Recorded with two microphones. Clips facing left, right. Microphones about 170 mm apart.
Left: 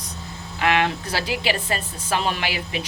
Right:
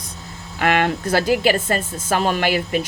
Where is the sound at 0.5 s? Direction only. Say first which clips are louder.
Right 2 dB; 50° right (ahead or behind).